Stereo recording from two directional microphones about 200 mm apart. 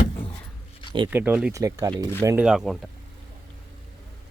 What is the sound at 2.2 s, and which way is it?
Speech, 5° right (ahead or behind).